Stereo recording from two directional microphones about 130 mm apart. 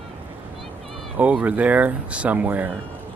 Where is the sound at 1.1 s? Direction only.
10° right (ahead or behind).